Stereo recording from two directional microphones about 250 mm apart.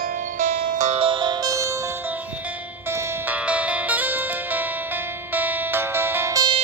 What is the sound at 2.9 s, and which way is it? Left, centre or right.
Music, centre.